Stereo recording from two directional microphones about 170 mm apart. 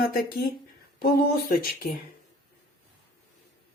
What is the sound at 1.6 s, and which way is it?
Speech, 60° left (ahead or behind).